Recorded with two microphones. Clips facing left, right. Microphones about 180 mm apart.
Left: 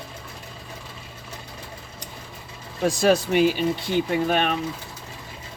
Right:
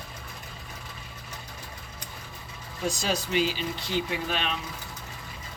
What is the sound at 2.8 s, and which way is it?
Speech, 60° left (ahead or behind).